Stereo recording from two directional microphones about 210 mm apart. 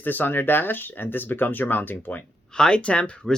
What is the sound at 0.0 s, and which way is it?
Speech, 10° left (ahead or behind).